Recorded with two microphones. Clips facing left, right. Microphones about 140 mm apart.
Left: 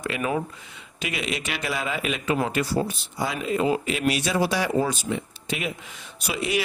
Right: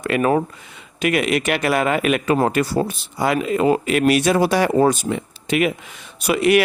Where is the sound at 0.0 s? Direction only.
55° right (ahead or behind).